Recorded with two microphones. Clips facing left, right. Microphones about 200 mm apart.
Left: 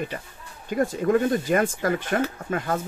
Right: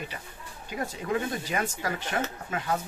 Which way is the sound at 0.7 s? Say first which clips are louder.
Left 9 dB; 50° left (ahead or behind).